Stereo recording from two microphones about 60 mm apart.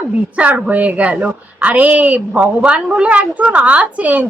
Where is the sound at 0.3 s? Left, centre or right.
Right.